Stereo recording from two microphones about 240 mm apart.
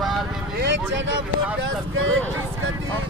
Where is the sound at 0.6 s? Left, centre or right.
Right.